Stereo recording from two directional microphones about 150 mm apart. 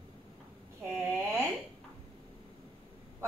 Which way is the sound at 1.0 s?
15° right (ahead or behind).